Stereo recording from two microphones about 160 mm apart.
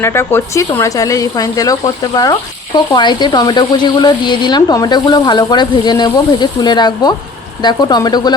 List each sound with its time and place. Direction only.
0.0 s speech: 15° left (ahead or behind)